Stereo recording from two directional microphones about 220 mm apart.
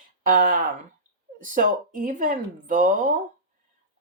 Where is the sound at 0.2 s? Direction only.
40° right (ahead or behind).